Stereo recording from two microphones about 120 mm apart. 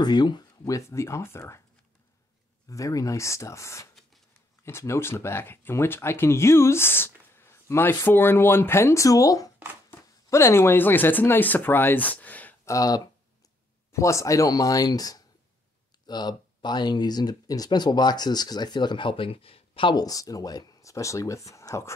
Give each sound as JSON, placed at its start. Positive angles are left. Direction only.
{"t": 0.0, "sound": "speech", "side_deg": 35}
{"t": 2.7, "sound": "speech", "side_deg": 25}
{"t": 12.6, "sound": "speech", "side_deg": 30}